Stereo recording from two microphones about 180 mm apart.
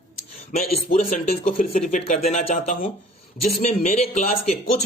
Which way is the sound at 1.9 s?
40° left (ahead or behind).